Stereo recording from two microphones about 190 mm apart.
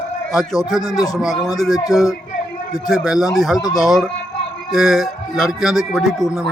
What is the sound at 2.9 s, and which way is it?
Speech, centre (ahead or behind).